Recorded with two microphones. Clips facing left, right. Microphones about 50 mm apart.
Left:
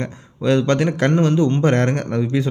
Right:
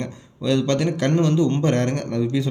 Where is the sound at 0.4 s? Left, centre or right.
Left.